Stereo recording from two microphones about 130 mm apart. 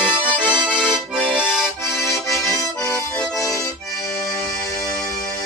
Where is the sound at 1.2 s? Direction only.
5° right (ahead or behind).